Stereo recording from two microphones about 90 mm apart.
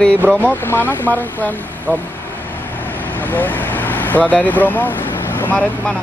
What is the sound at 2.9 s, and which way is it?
Vehicle, 20° left (ahead or behind).